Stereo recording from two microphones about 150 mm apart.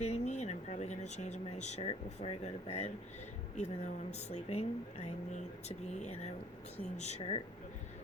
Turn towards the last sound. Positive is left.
turn(degrees=45)  # may be behind; listen again after turning